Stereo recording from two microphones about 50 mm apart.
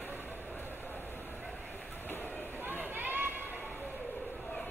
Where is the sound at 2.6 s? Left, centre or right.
Right.